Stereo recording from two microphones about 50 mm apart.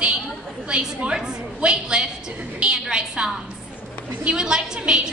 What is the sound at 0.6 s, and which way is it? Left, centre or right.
A woman's voice, centre.